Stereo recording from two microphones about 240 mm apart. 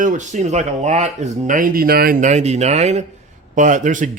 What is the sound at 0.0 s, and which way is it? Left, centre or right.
A man's voice, right.